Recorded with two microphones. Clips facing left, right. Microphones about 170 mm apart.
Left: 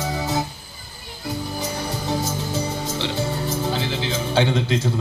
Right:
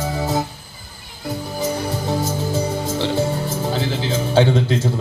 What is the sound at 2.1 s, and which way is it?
Music, 45° right (ahead or behind).